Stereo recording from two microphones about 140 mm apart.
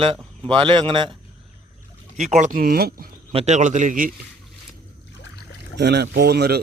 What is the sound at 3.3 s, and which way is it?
Speech, 55° right (ahead or behind).